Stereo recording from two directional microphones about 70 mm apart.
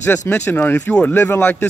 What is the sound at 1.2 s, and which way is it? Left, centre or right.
Speech, left.